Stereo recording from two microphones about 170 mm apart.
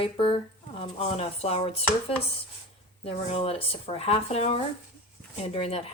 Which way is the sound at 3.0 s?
35° left (ahead or behind).